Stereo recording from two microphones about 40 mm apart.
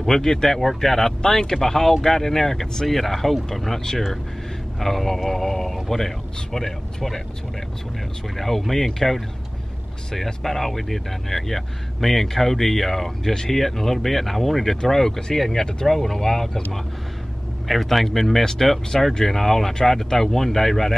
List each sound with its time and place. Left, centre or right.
0.0 s speech: centre
8.4 s speech: centre
13.3 s speech: centre
13.6 s speech: centre
17.6 s speech: centre